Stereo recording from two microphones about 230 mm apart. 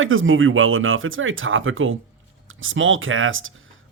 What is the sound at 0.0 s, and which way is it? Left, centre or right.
Speech, right.